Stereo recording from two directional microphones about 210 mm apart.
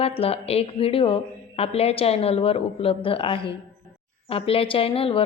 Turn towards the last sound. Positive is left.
turn(degrees=25)  # may be behind; listen again after turning